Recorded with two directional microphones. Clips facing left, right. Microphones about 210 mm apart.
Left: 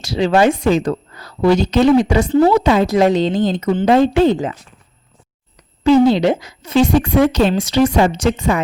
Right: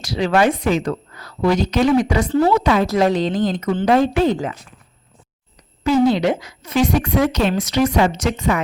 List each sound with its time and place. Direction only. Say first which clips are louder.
0.0 s speech: left 3 dB; 25° left (ahead or behind)
6.1 s speech: left 3 dB; 30° left (ahead or behind)